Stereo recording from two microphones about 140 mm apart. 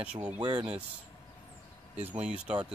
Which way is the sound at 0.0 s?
10° right (ahead or behind).